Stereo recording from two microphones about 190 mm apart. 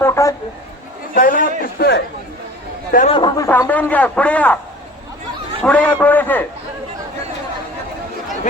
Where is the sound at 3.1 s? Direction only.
25° left (ahead or behind).